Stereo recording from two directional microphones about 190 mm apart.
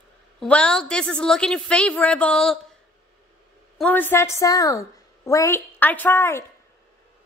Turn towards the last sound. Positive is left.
turn(degrees=10)  # may be behind; listen again after turning